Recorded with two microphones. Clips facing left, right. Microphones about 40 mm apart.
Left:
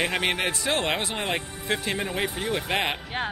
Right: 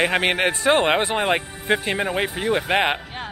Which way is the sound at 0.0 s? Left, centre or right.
Right.